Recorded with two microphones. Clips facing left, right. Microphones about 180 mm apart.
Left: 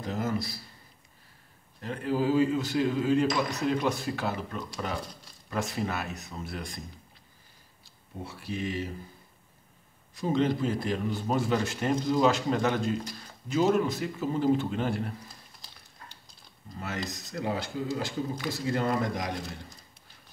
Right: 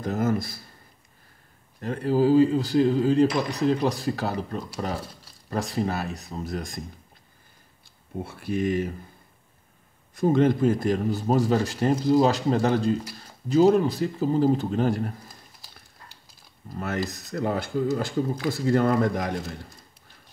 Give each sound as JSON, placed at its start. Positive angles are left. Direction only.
{"t": 0.0, "sound": "speech", "side_deg": -50}
{"t": 1.8, "sound": "a man's voice", "side_deg": -40}
{"t": 8.2, "sound": "speech", "side_deg": -50}
{"t": 10.1, "sound": "a man's voice", "side_deg": -50}
{"t": 15.6, "sound": "a sound", "side_deg": -10}
{"t": 16.7, "sound": "speech", "side_deg": -55}